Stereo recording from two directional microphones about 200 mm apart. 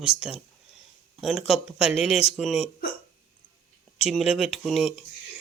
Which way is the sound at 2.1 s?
30° left (ahead or behind).